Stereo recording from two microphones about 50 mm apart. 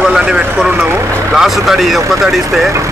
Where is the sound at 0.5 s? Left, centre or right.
Right.